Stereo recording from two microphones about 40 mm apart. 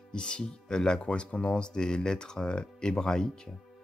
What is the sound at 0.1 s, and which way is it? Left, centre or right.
Speech, left.